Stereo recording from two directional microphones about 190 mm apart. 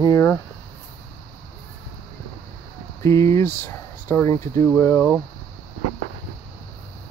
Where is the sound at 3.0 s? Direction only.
15° left (ahead or behind).